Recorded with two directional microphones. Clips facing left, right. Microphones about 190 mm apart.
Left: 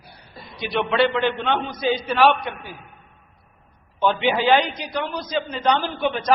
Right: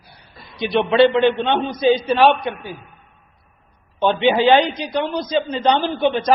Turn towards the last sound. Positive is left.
turn(degrees=-25)  # may be behind; listen again after turning